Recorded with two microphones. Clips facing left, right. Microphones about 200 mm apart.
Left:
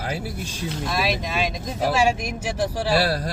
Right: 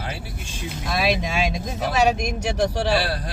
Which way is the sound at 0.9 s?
Centre (ahead or behind).